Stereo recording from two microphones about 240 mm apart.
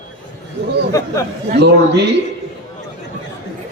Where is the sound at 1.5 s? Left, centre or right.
Right.